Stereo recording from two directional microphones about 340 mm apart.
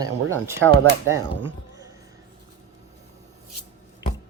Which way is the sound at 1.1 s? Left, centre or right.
Centre.